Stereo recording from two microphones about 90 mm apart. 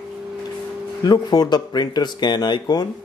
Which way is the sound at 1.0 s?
50° left (ahead or behind).